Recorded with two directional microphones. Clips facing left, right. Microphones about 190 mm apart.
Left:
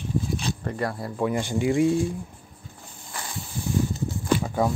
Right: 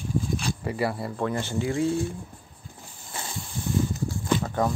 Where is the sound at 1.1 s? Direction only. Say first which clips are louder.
Left 6 dB; 10° left (ahead or behind).